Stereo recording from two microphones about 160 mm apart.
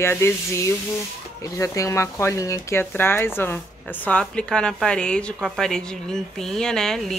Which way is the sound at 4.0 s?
5° left (ahead or behind).